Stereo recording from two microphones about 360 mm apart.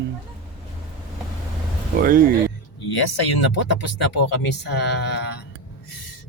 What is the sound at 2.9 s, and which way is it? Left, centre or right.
Speech, left.